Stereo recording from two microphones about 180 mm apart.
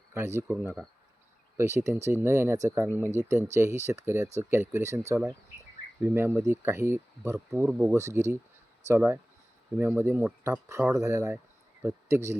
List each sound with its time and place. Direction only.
0.1 s speech: 15° right (ahead or behind)